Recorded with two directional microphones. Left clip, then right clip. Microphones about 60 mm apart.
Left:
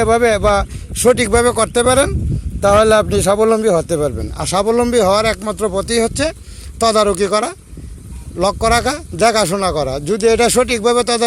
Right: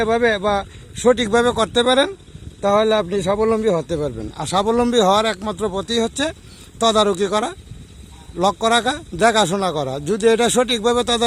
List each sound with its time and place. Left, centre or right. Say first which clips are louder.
0.0 s speech: left 5 dB; left
1.1 s speech: left 3 dB; centre
2.6 s a man's voice: left 6 dB; left
3.8 s speech: left 6 dB; centre
4.6 s speech: left 3 dB; right
5.5 s speech: left 5 dB; centre; by 11.3 s right